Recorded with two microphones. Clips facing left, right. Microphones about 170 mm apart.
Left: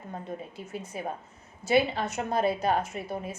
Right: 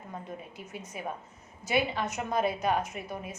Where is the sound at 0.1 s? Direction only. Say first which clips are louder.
Left 4 dB; 30° left (ahead or behind).